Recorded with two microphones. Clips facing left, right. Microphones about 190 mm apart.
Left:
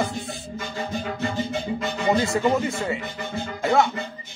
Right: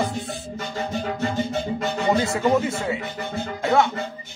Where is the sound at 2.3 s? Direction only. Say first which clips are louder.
Right 1 dB; 5° right (ahead or behind).